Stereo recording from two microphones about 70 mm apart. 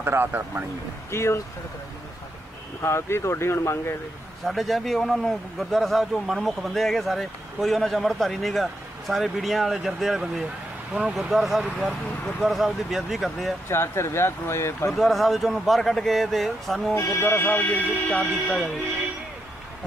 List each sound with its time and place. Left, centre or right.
0.0 s speech: right
1.1 s speech: left
2.8 s speech: left
4.5 s a man's voice: centre
13.7 s speech: left
14.9 s a man's voice: centre
16.9 s speech: left
18.2 s speech: centre